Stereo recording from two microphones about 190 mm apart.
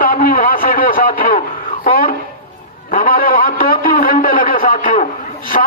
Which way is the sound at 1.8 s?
50° left (ahead or behind).